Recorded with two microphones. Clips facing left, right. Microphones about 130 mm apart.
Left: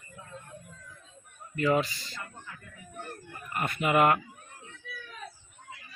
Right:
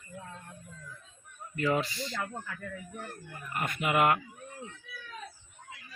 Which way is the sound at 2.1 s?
85° right.